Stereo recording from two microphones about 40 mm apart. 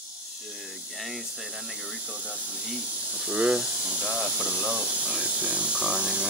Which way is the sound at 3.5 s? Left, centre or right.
Right.